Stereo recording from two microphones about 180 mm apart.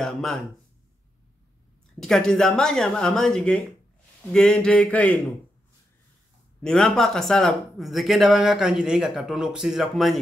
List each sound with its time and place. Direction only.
0.0 s speech: centre (ahead or behind)
2.0 s speech: 5° left (ahead or behind)
6.6 s speech: 5° left (ahead or behind)